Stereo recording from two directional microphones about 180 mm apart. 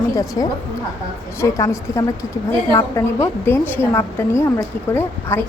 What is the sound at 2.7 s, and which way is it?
A woman's voice, 15° left (ahead or behind).